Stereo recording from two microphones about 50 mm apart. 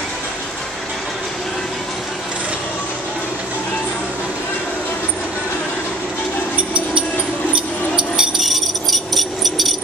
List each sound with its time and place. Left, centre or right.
6.7 s music: right
7.5 s a sound: centre
8.4 s music: centre